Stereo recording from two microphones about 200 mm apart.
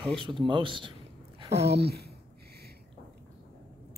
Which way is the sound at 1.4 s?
30° right (ahead or behind).